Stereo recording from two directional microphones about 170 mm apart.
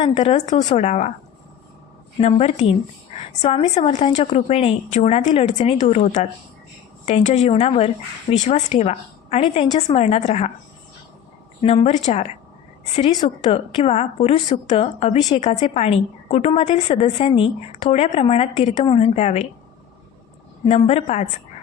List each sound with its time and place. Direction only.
0.0 s a woman's voice: 35° left (ahead or behind)
2.1 s a woman's voice: 40° left (ahead or behind)
11.6 s a woman's voice: 35° left (ahead or behind)
20.7 s a woman's voice: 35° left (ahead or behind)